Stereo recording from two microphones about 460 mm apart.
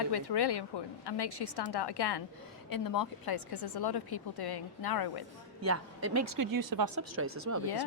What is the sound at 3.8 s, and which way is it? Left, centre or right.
Speech, left.